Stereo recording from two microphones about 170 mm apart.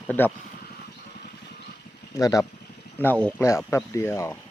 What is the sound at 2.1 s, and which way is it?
Speech, 20° left (ahead or behind).